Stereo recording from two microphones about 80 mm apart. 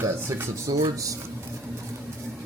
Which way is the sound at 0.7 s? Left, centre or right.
Right.